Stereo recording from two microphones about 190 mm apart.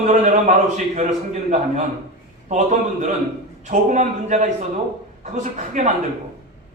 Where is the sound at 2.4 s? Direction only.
40° right (ahead or behind).